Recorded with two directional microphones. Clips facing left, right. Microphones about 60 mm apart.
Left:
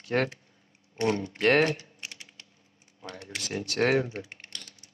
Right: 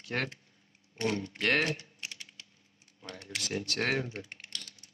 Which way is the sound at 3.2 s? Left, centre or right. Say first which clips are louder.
Left 1 dB; centre.